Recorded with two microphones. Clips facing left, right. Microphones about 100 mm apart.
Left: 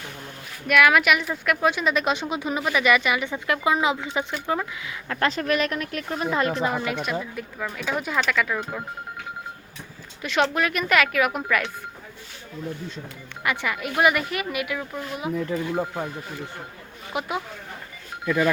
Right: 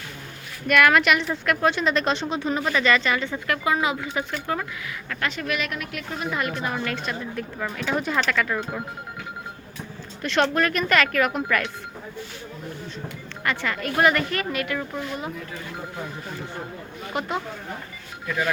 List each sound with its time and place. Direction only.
0.7 s a woman's voice: 5° left (ahead or behind)
5.0 s speech: 35° left (ahead or behind)
6.7 s a woman's voice: 10° left (ahead or behind)
10.2 s a woman's voice: 5° left (ahead or behind)
13.4 s a woman's voice: 15° left (ahead or behind)
17.1 s a woman's voice: 5° left (ahead or behind)